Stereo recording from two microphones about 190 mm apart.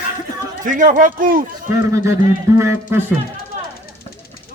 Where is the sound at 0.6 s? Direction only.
45° right (ahead or behind).